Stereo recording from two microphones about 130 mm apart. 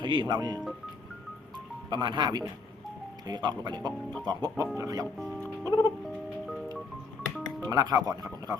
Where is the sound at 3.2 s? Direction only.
30° right (ahead or behind).